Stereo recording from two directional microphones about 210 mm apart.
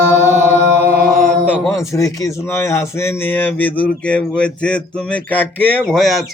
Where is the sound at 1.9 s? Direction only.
15° left (ahead or behind).